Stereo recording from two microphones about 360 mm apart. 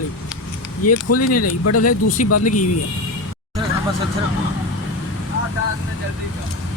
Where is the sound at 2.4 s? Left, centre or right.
Left.